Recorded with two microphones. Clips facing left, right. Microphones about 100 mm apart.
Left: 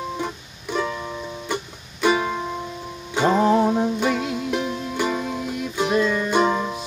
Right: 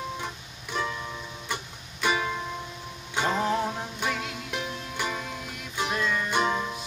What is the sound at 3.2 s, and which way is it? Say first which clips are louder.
Music: left 9 dB; 25° left (ahead or behind).